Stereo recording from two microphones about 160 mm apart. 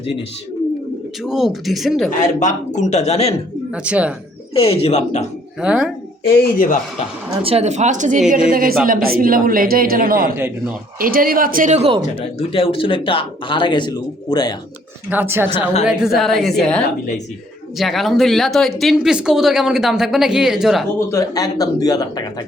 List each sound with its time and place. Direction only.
1.2 s speech: 5° right (ahead or behind)
2.0 s a man's voice: 50° left (ahead or behind)
3.8 s speech: 10° right (ahead or behind)
4.5 s speech: 40° left (ahead or behind)
5.5 s speech: 5° right (ahead or behind)
6.2 s speech: 65° left (ahead or behind)
7.4 s a woman's voice: 40° right (ahead or behind)
12.2 s speech: 35° left (ahead or behind)
15.1 s speech: 15° right (ahead or behind)
21.1 s a man's voice: 20° left (ahead or behind)